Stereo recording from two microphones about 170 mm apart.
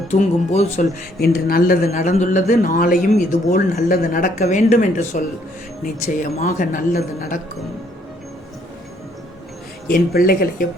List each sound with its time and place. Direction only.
0.1 s speech: 45° left (ahead or behind)
1.2 s speech: 60° left (ahead or behind)
1.9 s speech: 45° left (ahead or behind)
9.9 s speech: 60° left (ahead or behind)